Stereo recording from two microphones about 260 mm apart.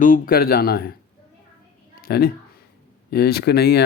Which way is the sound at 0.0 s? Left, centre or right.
Left.